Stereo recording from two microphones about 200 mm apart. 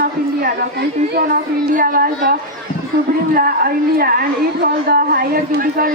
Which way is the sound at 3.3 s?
50° right (ahead or behind).